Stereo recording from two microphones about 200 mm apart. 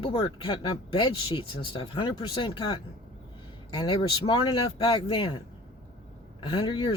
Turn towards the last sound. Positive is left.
turn(degrees=25)  # may be behind; listen again after turning